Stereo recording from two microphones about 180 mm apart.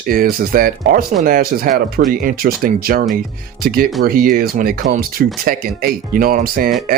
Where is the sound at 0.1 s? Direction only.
55° right (ahead or behind).